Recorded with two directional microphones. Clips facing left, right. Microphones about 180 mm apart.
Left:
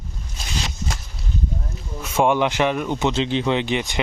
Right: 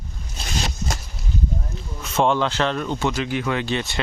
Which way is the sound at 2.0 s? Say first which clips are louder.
Left 1 dB; 10° left (ahead or behind).